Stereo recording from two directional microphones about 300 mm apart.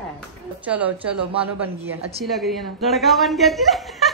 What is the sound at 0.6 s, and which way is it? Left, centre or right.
Speech, centre.